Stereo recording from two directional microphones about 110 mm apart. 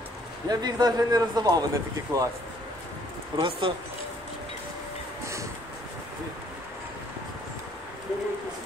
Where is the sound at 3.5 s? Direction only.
55° right (ahead or behind).